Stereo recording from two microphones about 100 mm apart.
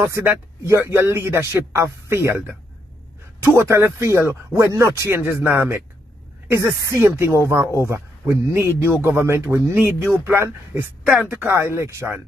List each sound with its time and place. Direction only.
0.0 s speech: 25° right (ahead or behind)
3.4 s speech: 25° right (ahead or behind)
6.5 s speech: 30° right (ahead or behind)